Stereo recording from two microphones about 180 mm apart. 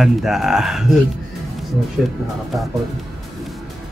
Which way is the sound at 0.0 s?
Centre (ahead or behind).